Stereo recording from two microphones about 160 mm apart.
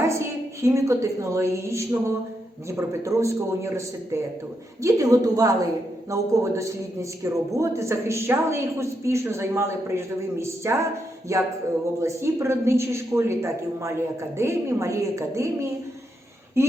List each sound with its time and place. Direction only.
0.6 s a man's voice: 20° right (ahead or behind)
16.6 s speech: 15° right (ahead or behind)